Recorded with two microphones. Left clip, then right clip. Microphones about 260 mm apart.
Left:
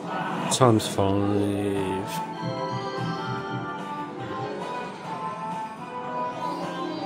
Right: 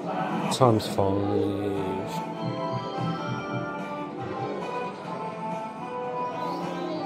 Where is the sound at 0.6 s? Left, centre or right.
Centre.